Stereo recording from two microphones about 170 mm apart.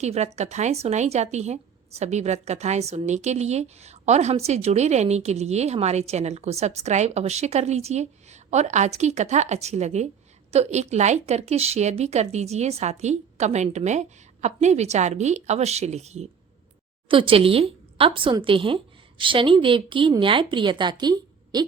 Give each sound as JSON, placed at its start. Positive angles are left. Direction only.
{"t": 0.0, "sound": "a woman's voice", "side_deg": -40}